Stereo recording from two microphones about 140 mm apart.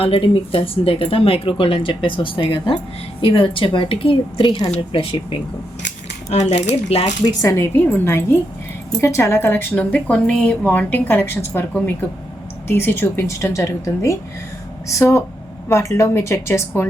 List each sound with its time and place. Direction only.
0.0 s speech: 40° left (ahead or behind)
6.3 s speech: 50° left (ahead or behind)
7.4 s a woman's voice: 20° left (ahead or behind)